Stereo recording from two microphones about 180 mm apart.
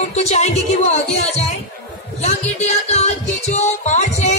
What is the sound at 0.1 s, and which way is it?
Music, 40° left (ahead or behind).